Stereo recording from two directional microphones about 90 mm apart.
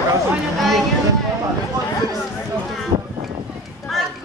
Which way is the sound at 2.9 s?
40° right (ahead or behind).